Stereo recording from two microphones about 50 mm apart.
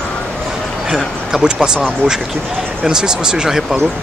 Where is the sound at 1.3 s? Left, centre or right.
Centre.